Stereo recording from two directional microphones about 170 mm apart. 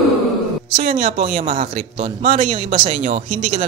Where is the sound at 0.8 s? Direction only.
40° right (ahead or behind).